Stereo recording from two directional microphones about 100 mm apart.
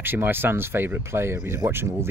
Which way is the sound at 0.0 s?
20° right (ahead or behind).